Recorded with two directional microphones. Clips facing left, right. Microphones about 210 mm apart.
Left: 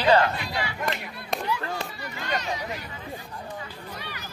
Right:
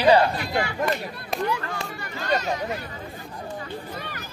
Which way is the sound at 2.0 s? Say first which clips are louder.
Right 7 dB; 40° right (ahead or behind).